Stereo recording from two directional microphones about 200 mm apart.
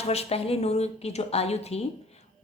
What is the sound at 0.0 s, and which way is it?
Speech, 30° left (ahead or behind).